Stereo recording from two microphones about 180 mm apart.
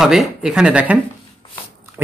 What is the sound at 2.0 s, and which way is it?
Pig, 15° right (ahead or behind).